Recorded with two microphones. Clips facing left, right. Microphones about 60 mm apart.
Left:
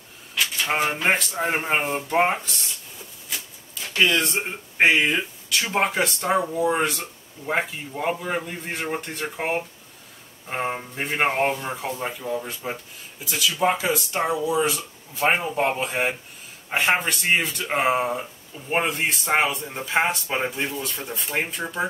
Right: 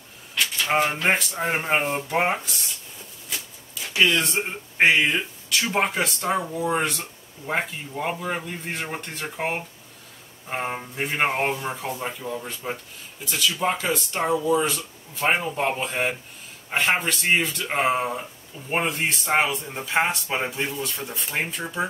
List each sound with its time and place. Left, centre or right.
0.3 s speech: centre
4.0 s speech: centre